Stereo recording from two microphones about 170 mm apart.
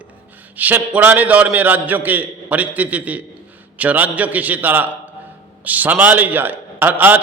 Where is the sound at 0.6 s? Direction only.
10° right (ahead or behind).